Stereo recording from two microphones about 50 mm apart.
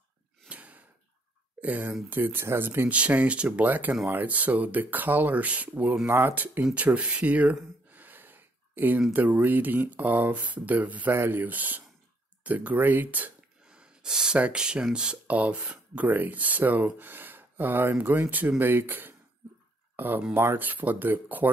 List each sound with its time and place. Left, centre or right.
0.5 s sigh: right
1.6 s speech: right
2.9 s speech: right
6.0 s speech: right
6.3 s speech: right
6.6 s speech: right
7.9 s a sound: right
9.1 s speech: right
11.1 s speech: right
13.7 s a sound: centre
14.5 s speech: centre; by 21.5 s right